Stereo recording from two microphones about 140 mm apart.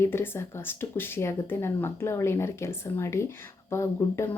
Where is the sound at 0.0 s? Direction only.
15° left (ahead or behind).